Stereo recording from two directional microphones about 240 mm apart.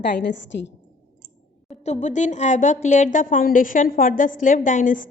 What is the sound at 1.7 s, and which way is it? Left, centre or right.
A woman's voice, left.